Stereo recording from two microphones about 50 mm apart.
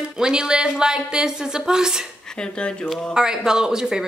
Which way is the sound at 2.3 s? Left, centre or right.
Centre.